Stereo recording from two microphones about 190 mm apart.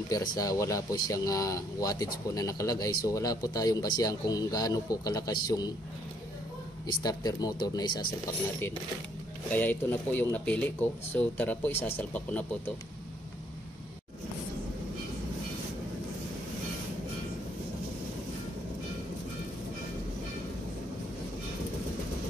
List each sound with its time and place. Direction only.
0.1 s speech: 20° left (ahead or behind)
6.9 s speech: 20° left (ahead or behind)
9.5 s speech: 10° left (ahead or behind)